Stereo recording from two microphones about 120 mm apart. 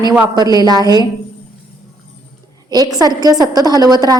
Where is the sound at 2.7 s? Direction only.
30° right (ahead or behind).